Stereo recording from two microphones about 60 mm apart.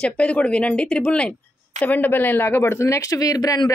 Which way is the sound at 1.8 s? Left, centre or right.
Left.